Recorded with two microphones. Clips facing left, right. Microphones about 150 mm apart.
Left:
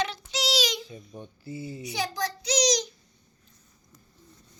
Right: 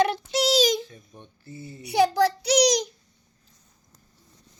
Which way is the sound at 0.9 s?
10° left (ahead or behind).